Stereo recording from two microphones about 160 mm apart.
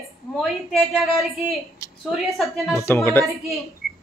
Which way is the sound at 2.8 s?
15° left (ahead or behind).